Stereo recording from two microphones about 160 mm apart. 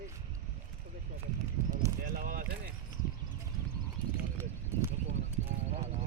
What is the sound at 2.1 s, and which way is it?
Speech, 60° right (ahead or behind).